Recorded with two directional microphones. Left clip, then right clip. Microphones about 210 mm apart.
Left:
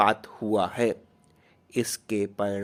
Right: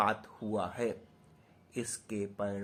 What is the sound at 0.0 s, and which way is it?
Speech, 45° left (ahead or behind).